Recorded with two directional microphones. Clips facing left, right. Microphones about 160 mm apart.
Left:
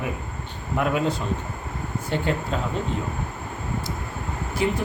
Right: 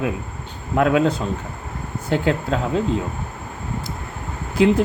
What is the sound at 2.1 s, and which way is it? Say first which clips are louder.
Speech: right 5 dB; 90° right.